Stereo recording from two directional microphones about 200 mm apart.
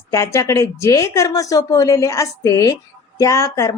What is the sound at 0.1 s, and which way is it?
Speech, 15° left (ahead or behind).